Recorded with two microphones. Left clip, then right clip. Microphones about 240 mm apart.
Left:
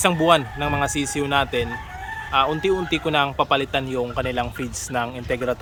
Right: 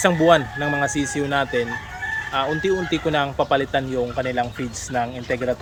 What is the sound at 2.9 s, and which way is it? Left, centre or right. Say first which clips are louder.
Speech: left 1 dB; centre.